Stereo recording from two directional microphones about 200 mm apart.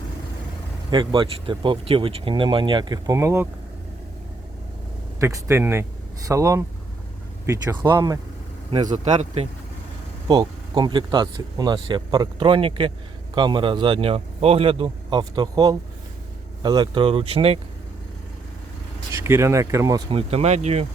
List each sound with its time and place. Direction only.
0.9 s speech: 25° right (ahead or behind)
5.2 s speech: 15° right (ahead or behind)
8.7 s speech: 35° right (ahead or behind)
10.2 s speech: 20° right (ahead or behind)
19.2 s speech: 15° right (ahead or behind)
20.1 s speech: 30° right (ahead or behind)